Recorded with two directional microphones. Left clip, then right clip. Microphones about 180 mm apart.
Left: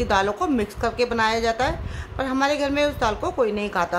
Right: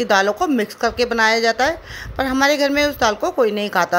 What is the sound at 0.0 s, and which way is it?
A woman's voice, 20° right (ahead or behind).